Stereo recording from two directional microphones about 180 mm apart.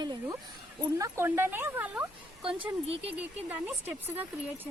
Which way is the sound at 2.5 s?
30° right (ahead or behind).